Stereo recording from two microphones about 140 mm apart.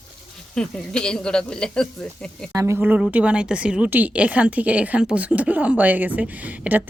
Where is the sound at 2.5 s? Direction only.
20° right (ahead or behind).